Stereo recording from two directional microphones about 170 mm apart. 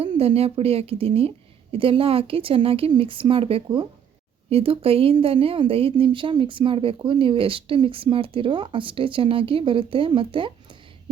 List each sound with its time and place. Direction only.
0.0 s speech: 35° right (ahead or behind)